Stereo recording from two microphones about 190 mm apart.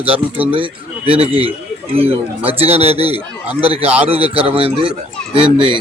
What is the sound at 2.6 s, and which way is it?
Speech, 30° right (ahead or behind).